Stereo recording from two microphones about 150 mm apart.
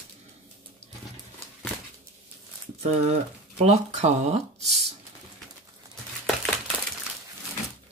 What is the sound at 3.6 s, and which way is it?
Speech, 45° right (ahead or behind).